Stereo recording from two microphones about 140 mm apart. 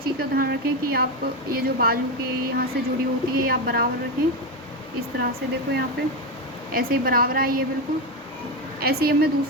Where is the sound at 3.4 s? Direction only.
90° right.